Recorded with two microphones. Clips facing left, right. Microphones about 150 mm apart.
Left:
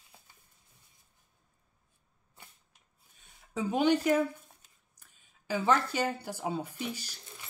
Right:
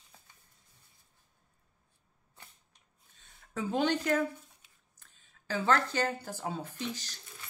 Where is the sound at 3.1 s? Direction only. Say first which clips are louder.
Left 2 dB; 15° left (ahead or behind).